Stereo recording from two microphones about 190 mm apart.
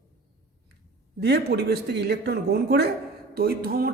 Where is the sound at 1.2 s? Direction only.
60° right (ahead or behind).